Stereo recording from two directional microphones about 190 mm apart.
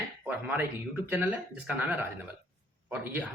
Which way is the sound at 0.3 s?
10° right (ahead or behind).